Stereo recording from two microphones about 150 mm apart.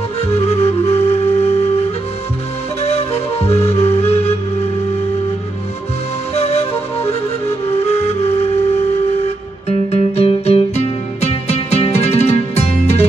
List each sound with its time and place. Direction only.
0.3 s flute: 45° left (ahead or behind)
2.8 s music: 45° left (ahead or behind)
6.3 s flute: 45° left (ahead or behind)
9.7 s music: 45° left (ahead or behind)